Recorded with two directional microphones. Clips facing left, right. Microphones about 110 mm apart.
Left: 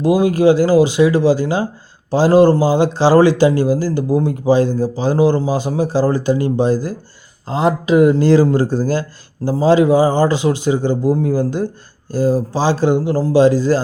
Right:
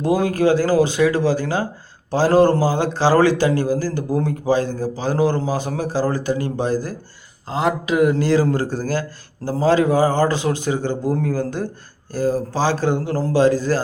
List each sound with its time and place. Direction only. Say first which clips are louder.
0.0 s speech: left 5 dB; 10° left (ahead or behind)